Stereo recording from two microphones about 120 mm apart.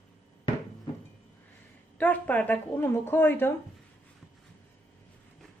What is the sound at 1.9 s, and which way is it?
Speech, 10° left (ahead or behind).